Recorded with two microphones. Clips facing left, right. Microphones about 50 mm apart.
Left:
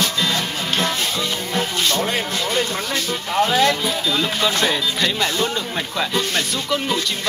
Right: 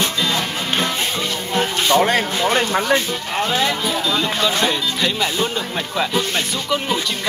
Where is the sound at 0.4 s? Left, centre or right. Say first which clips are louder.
Right 1 dB; centre.